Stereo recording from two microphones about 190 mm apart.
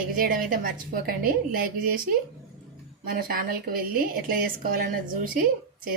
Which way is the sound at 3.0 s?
50° right (ahead or behind).